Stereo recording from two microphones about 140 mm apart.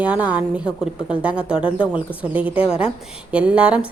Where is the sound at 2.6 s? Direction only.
45° left (ahead or behind).